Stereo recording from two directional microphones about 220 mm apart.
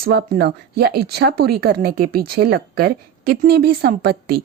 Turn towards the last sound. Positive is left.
turn(degrees=-45)  # may be behind; listen again after turning